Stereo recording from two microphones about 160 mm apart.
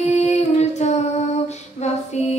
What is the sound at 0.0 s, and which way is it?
Female singing, 45° left (ahead or behind).